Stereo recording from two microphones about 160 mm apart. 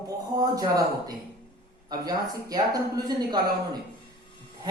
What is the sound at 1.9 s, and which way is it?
A man's voice, 25° right (ahead or behind).